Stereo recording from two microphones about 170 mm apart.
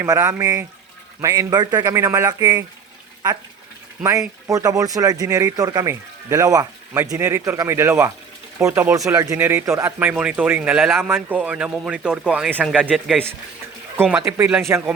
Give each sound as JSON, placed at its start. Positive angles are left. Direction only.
{"t": 0.0, "sound": "speech", "side_deg": -20}
{"t": 4.4, "sound": "speech", "side_deg": -20}